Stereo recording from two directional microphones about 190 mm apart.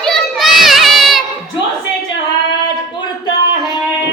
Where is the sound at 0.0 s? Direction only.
Centre (ahead or behind).